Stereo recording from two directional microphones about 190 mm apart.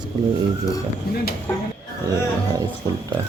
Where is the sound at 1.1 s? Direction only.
55° left (ahead or behind).